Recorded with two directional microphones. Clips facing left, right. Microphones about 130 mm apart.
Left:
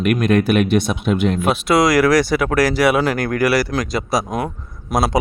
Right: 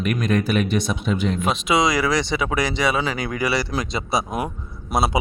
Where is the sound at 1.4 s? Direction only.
Centre (ahead or behind).